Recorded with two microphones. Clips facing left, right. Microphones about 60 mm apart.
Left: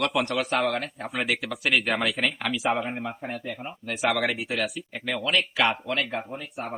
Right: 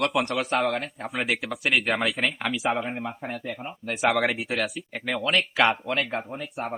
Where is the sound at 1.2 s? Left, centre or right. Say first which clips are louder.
Even; centre.